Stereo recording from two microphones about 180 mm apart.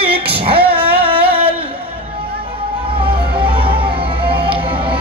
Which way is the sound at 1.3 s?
10° right (ahead or behind).